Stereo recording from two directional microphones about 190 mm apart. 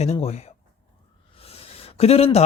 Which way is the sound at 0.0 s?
35° left (ahead or behind).